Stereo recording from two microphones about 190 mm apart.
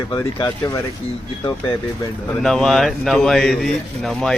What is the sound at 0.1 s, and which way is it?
Speech, 20° left (ahead or behind).